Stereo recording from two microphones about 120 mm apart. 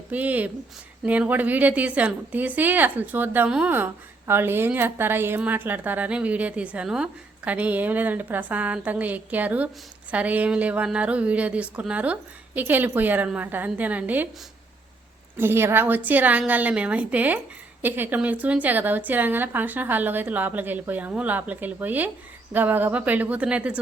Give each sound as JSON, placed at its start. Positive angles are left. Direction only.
{"t": 0.1, "sound": "a woman's voice", "side_deg": -15}
{"t": 15.4, "sound": "a woman's voice", "side_deg": -20}